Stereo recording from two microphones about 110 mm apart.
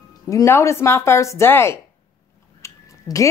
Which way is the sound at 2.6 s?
30° left (ahead or behind).